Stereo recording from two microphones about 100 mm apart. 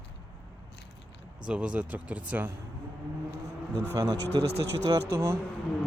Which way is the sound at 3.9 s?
35° right (ahead or behind).